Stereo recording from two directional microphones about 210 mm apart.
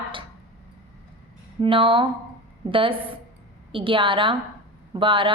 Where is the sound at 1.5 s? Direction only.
25° right (ahead or behind).